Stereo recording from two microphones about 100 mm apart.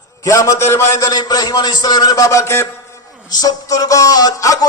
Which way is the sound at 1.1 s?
40° left (ahead or behind).